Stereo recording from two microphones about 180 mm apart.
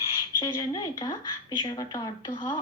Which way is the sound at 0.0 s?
25° left (ahead or behind).